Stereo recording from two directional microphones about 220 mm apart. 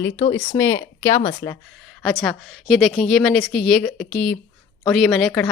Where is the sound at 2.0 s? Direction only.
5° left (ahead or behind).